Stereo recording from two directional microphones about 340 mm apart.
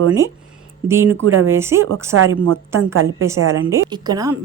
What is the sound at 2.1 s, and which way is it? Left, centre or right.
Speech, right.